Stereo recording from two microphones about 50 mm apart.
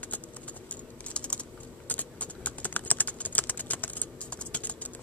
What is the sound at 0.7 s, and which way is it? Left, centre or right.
Typing, left.